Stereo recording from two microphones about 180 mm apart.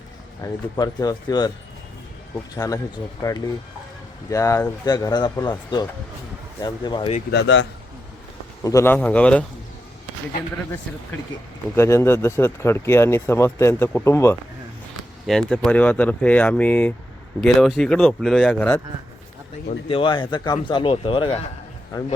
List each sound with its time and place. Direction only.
0.4 s speech: 20° left (ahead or behind)
2.6 s speech: 20° left (ahead or behind)
4.3 s speech: 15° left (ahead or behind)
7.3 s speech: 80° left
8.6 s speech: 15° left (ahead or behind)
11.7 s speech: 15° left (ahead or behind)
15.3 s speech: 5° left (ahead or behind)
19.9 s speech: 30° left (ahead or behind)